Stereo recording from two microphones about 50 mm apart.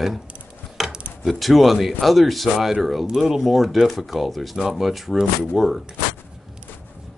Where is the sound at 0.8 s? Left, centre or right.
Centre.